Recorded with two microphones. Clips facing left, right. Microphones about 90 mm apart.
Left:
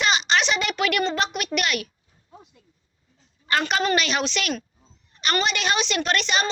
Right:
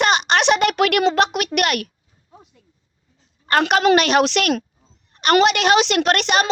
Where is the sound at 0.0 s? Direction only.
55° right (ahead or behind).